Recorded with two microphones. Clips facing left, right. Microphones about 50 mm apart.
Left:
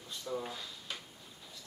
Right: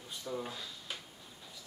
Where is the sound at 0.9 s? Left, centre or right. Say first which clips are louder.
Left 1 dB; centre.